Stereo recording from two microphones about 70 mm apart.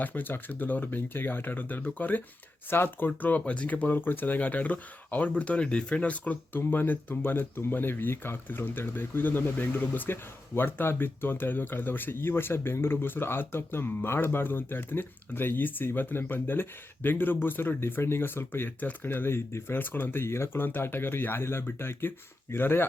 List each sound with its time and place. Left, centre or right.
0.0 s speech: left